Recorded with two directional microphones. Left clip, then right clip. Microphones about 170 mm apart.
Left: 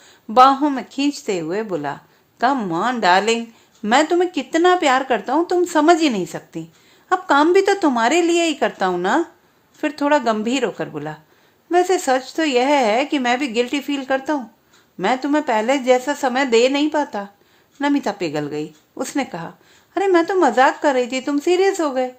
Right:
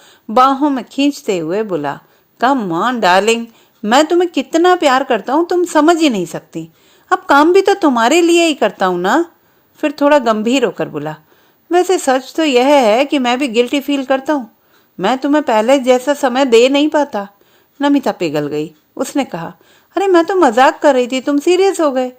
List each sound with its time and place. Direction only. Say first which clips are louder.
0.0 s a woman's voice: right 1 dB; 30° right (ahead or behind)